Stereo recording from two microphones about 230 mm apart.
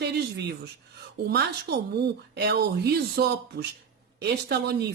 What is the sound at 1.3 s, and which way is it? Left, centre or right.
Speech, right.